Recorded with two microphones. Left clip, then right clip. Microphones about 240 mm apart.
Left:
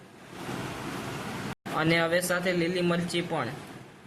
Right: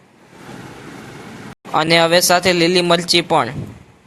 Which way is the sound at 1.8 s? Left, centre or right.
Right.